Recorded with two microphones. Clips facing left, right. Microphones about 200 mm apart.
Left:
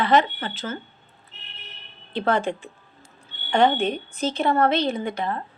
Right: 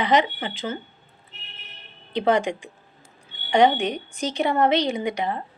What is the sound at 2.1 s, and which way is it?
A woman's voice, 15° right (ahead or behind).